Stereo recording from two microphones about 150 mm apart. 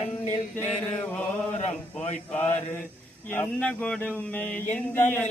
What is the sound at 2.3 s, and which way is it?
Speech, 10° left (ahead or behind).